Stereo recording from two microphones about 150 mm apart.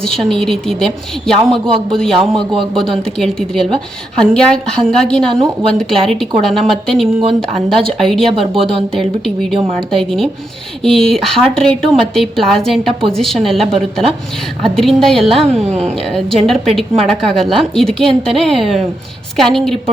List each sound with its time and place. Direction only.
0.0 s a woman's voice: centre (ahead or behind)
8.3 s speech: 40° right (ahead or behind)
9.0 s a woman's voice: centre (ahead or behind)
15.5 s speech: 45° right (ahead or behind)
16.5 s a woman's voice: centre (ahead or behind)